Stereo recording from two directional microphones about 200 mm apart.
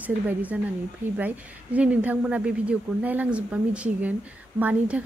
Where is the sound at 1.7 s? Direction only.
5° right (ahead or behind).